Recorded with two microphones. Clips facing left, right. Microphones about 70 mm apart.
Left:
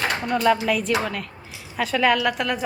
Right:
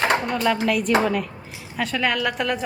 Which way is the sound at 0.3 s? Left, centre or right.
Centre.